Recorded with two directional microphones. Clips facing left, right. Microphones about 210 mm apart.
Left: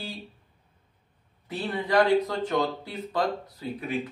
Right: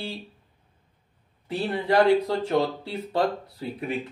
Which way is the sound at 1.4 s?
30° right (ahead or behind).